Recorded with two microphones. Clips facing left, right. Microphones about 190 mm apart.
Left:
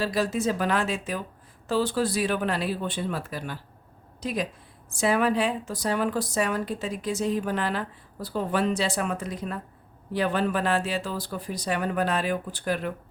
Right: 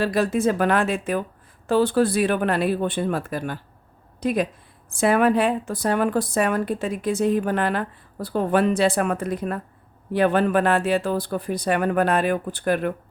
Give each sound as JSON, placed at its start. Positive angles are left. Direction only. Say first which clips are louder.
{"t": 0.0, "sound": "a woman's voice", "louder": "right 5 dB", "side_deg": -55}